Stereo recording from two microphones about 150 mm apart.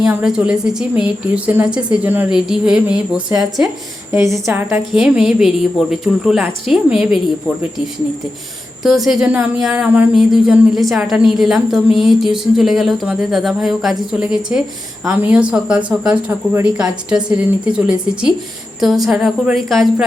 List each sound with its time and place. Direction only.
0.0 s a woman's voice: 5° right (ahead or behind)
4.1 s a woman's voice: 20° right (ahead or behind)
4.9 s speech: 5° right (ahead or behind)
8.8 s a woman's voice: 5° right (ahead or behind)